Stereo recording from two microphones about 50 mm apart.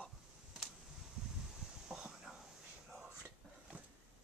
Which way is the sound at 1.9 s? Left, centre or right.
Centre.